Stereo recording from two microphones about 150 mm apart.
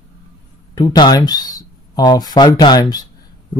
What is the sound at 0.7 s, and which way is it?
Speech, 25° left (ahead or behind).